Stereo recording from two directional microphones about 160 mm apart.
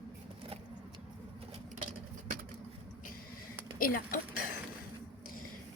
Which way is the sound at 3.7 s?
60° left (ahead or behind).